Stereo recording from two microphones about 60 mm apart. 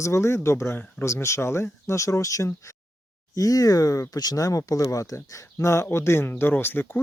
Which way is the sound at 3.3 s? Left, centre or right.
Left.